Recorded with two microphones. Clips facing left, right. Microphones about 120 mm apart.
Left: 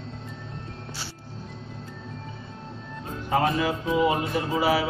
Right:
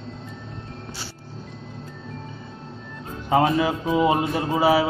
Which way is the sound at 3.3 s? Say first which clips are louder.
Right 4 dB; 30° right (ahead or behind).